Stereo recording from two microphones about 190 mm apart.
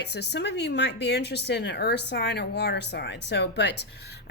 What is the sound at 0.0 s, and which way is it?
A woman's voice, 60° left (ahead or behind).